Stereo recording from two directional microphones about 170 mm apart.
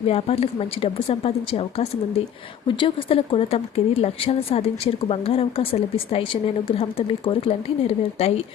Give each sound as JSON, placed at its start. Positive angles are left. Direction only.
{"t": 0.1, "sound": "speech", "side_deg": 35}